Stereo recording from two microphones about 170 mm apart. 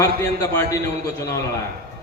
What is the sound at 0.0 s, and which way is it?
Speech, 20° left (ahead or behind).